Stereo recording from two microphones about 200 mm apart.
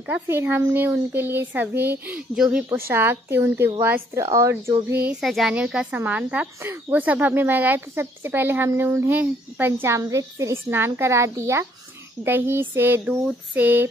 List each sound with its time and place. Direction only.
0.0 s a child's voice: 10° right (ahead or behind)